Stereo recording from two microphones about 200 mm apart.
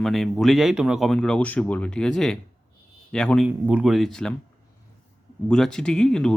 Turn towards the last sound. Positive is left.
turn(degrees=5)  # may be behind; listen again after turning